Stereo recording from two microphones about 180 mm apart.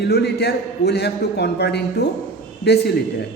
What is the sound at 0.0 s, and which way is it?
A man's voice, 65° left (ahead or behind).